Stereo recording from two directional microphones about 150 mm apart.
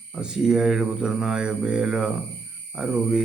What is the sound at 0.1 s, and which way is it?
Speech, 5° right (ahead or behind).